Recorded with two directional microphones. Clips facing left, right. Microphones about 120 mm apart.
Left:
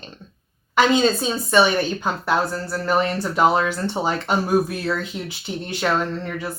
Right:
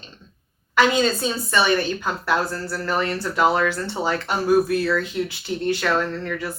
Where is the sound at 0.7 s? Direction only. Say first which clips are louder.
Left 2 dB; 20° left (ahead or behind).